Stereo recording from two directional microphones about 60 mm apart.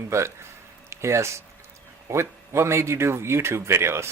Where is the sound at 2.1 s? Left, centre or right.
Right.